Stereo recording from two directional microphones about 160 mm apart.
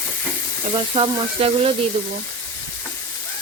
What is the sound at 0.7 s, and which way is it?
Speech, 35° right (ahead or behind).